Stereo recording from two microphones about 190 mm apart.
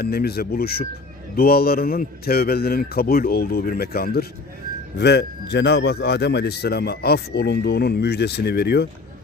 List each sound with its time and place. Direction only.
0.0 s a man's voice: 55° left (ahead or behind)